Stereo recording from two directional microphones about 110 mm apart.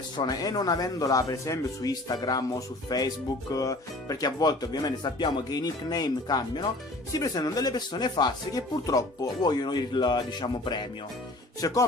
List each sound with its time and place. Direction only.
0.2 s speech: 35° left (ahead or behind)